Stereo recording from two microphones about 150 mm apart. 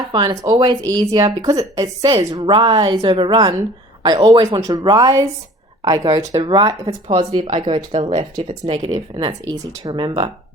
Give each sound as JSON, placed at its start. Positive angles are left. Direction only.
{"t": 0.1, "sound": "a woman's voice", "side_deg": -30}
{"t": 7.1, "sound": "speech", "side_deg": -40}